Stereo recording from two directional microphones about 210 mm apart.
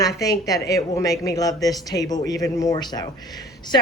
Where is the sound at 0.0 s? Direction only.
15° left (ahead or behind).